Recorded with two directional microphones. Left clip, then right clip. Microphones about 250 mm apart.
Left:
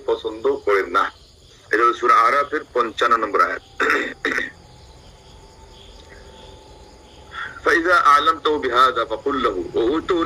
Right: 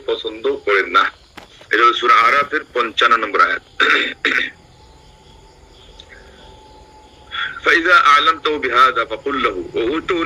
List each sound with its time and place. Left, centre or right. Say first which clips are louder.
0.0 s speech: right 1 dB; centre
7.6 s a man's voice: right 4 dB; centre